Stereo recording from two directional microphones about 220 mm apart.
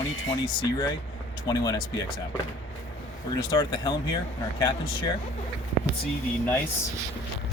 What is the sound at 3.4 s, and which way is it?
Speech, 20° left (ahead or behind).